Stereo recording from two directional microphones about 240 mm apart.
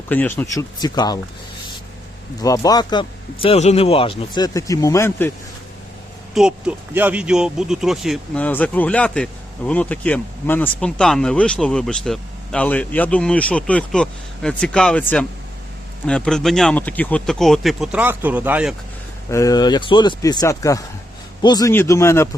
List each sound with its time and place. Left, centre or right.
0.1 s a man's voice: centre
2.4 s a man's voice: centre
6.3 s speech: centre
19.3 s a man's voice: centre